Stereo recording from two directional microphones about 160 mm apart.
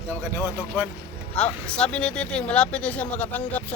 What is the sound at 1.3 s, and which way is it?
Speech, 5° left (ahead or behind).